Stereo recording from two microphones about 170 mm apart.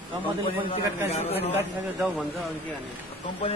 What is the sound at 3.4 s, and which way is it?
Speech, 35° left (ahead or behind).